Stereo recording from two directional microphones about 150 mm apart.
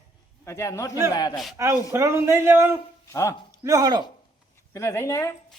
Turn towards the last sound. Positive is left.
turn(degrees=20)  # may be behind; listen again after turning